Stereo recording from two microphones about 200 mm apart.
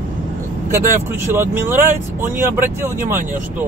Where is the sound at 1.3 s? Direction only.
10° right (ahead or behind).